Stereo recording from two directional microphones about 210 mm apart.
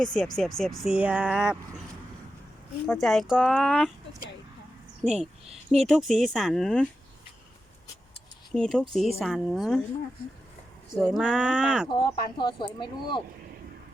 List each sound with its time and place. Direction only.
0.0 s speech: 5° left (ahead or behind)
2.8 s speech: centre (ahead or behind)
5.0 s speech: centre (ahead or behind)
8.5 s speech: centre (ahead or behind)
10.9 s speech: centre (ahead or behind)
11.9 s speech: 20° left (ahead or behind)